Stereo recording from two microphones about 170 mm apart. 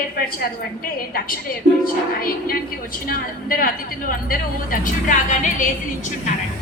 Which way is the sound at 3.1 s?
60° left (ahead or behind).